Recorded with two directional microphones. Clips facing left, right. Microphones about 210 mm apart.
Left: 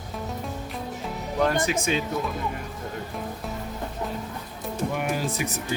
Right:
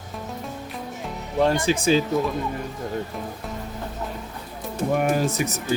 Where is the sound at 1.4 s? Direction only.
30° right (ahead or behind).